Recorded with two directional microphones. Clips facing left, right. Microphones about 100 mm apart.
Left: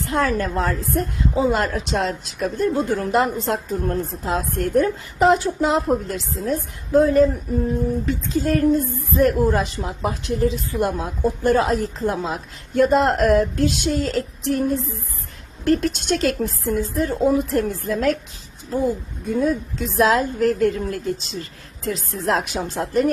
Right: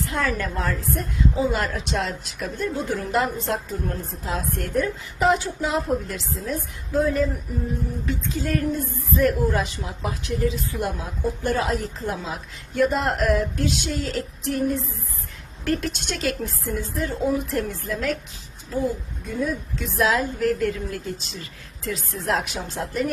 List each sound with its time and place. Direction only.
0.0 s a woman's voice: 45° left (ahead or behind)
12.1 s a woman's voice: 45° left (ahead or behind)
19.3 s a woman's voice: 35° left (ahead or behind)